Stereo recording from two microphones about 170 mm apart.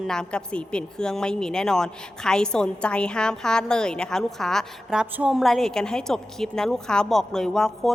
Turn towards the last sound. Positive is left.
turn(degrees=5)  # may be behind; listen again after turning